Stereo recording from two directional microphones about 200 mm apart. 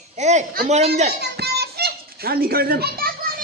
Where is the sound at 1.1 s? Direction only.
55° right (ahead or behind).